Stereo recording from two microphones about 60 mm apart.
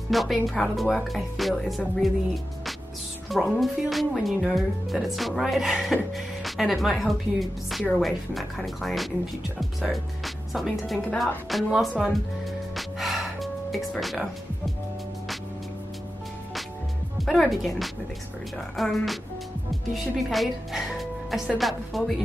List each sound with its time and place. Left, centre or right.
0.1 s speech: centre
12.7 s music: centre
17.2 s speech: centre